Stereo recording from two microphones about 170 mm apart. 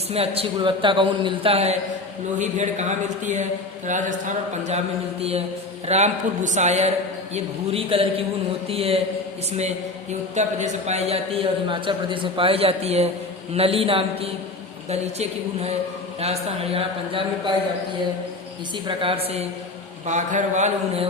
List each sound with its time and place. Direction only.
0.1 s a man's voice: 35° right (ahead or behind)
5.9 s a man's voice: 45° right (ahead or behind)
18.9 s a man's voice: 35° right (ahead or behind)
20.1 s speech: 45° right (ahead or behind)